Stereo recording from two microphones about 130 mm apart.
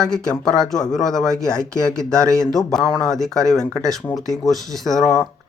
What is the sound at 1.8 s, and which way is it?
Speech, 25° right (ahead or behind).